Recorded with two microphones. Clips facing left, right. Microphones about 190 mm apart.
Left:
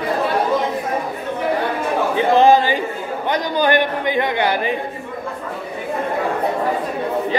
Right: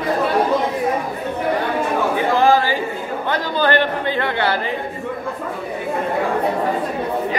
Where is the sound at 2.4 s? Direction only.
20° left (ahead or behind).